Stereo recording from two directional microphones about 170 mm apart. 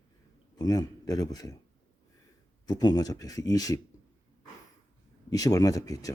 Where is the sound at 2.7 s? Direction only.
25° left (ahead or behind).